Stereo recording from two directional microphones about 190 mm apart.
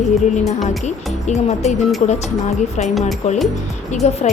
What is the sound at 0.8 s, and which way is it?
A woman's voice, 35° left (ahead or behind).